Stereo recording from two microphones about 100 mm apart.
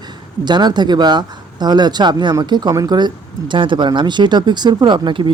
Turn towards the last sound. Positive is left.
turn(degrees=-55)  # may be behind; listen again after turning